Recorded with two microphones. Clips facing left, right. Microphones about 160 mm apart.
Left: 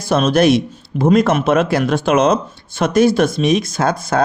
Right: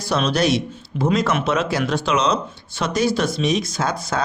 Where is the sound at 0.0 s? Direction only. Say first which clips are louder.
Left 6 dB; 50° left (ahead or behind).